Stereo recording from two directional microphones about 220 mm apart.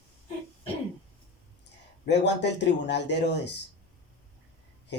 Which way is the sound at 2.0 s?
50° left (ahead or behind).